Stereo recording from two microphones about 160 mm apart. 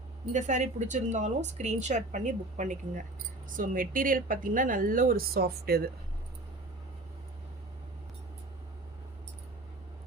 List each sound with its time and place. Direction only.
0.3 s a woman's voice: 50° right (ahead or behind); by 5.9 s 75° right (ahead or behind)